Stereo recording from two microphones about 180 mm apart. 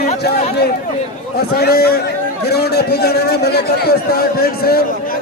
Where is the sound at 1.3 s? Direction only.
60° left (ahead or behind).